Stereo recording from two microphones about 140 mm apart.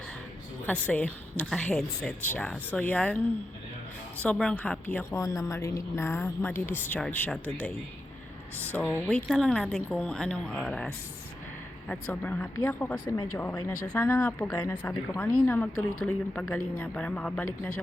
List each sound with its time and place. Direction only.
0.6 s a woman's voice: 10° left (ahead or behind)
4.2 s a woman's voice: 10° left (ahead or behind)
5.1 s a woman's voice: 25° left (ahead or behind)
8.7 s a woman's voice: 10° left (ahead or behind)